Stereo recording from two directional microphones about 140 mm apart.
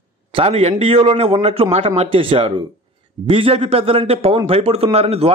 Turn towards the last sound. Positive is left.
turn(degrees=-45)  # may be behind; listen again after turning